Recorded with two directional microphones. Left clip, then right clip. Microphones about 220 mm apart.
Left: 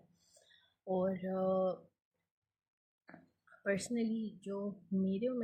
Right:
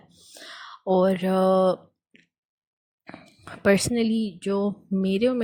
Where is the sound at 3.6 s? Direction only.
40° right (ahead or behind).